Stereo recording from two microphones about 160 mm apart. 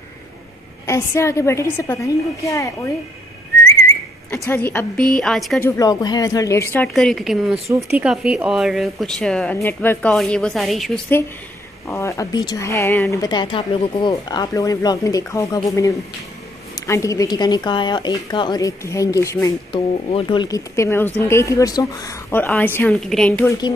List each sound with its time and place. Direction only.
0.8 s a woman's voice: 15° left (ahead or behind)
4.3 s speech: 10° left (ahead or behind)
5.6 s a woman's voice: 25° left (ahead or behind)
6.9 s a woman's voice: centre (ahead or behind)
11.9 s a woman's voice: 20° left (ahead or behind)
19.7 s a woman's voice: 35° left (ahead or behind); by 23.5 s 5° left (ahead or behind)